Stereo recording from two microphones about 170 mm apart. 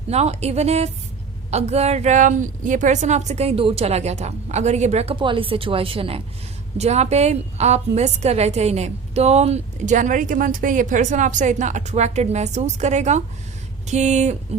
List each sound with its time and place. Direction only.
0.1 s a woman's voice: 40° right (ahead or behind)